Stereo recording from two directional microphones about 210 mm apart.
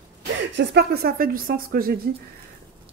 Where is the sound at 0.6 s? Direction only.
50° right (ahead or behind).